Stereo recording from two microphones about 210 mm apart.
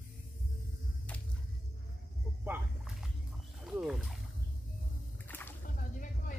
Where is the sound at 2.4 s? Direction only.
5° right (ahead or behind).